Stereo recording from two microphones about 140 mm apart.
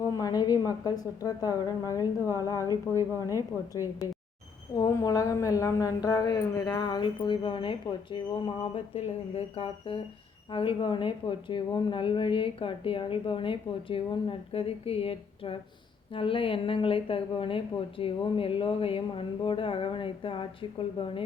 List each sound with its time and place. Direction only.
0.0 s a woman's voice: 25° left (ahead or behind)
4.8 s speech: 25° left (ahead or behind)